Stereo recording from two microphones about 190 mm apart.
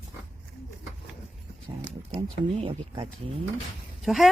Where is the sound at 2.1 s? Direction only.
30° right (ahead or behind).